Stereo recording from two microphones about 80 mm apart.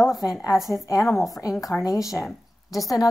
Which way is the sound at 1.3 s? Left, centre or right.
Left.